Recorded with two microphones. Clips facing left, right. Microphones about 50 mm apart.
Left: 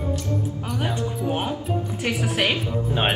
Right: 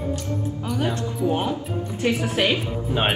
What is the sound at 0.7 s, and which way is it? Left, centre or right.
Speech, centre.